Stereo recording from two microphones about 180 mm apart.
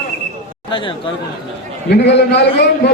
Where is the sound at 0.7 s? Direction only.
25° left (ahead or behind).